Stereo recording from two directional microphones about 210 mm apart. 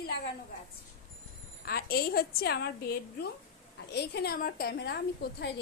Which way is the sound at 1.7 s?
45° left (ahead or behind).